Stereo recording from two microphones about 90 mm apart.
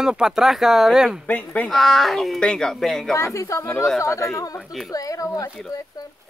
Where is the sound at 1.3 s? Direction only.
15° left (ahead or behind).